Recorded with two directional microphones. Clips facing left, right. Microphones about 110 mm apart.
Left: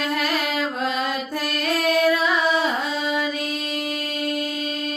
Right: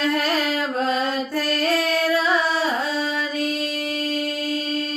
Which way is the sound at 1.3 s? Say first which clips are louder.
Right 3 dB; 15° left (ahead or behind).